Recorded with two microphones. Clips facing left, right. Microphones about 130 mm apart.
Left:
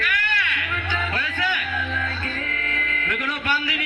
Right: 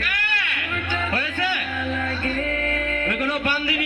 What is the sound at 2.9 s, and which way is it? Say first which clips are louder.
Music: right 4 dB; 45° right (ahead or behind).